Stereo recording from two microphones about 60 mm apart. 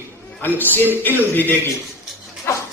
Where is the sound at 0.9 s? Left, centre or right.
Left.